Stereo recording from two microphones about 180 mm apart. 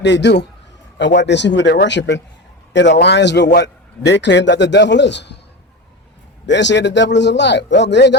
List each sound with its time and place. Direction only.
0.0 s a man's voice: 75° left (ahead or behind)
6.4 s a man's voice: 75° left (ahead or behind)